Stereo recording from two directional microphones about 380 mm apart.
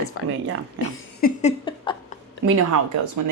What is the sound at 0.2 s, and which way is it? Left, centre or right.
Speech, left.